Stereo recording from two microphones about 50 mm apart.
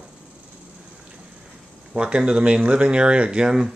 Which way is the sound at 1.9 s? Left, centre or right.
Centre.